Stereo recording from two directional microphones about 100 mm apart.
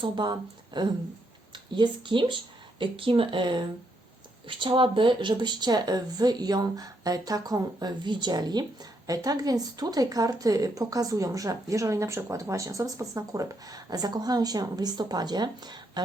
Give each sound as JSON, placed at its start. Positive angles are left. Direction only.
{"t": 0.0, "sound": "speech", "side_deg": -50}